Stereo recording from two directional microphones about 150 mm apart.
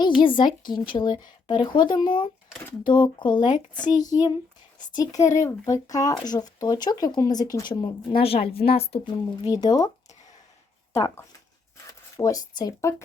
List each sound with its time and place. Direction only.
0.2 s speech: 30° left (ahead or behind)
8.2 s speech: 40° left (ahead or behind)
9.4 s speech: 25° left (ahead or behind)
10.9 s speech: 20° left (ahead or behind)